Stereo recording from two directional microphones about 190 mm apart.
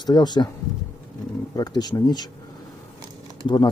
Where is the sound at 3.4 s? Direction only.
25° left (ahead or behind).